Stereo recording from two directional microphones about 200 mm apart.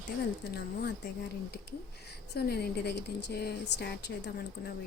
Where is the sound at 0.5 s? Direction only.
55° left (ahead or behind).